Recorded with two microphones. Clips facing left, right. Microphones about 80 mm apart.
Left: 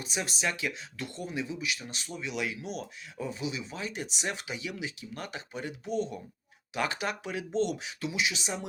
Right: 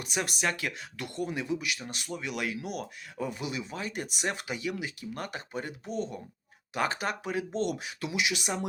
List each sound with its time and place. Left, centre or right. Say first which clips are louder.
0.0 s speech: right 2 dB; right